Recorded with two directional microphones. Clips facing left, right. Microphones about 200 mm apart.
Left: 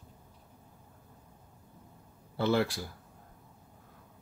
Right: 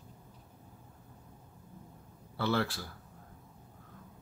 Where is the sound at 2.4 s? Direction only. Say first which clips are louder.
Left 4 dB; 15° left (ahead or behind).